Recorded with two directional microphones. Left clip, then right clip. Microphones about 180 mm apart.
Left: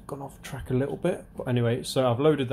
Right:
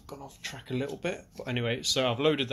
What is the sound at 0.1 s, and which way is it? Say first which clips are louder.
Speech: even; 20° left (ahead or behind).